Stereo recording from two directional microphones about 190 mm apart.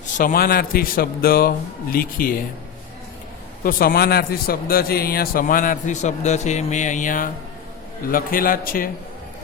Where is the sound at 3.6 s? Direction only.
50° left (ahead or behind).